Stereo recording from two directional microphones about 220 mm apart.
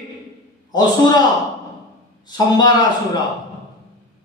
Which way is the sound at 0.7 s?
20° left (ahead or behind).